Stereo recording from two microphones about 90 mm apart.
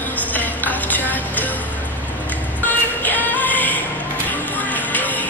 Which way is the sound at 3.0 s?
20° left (ahead or behind).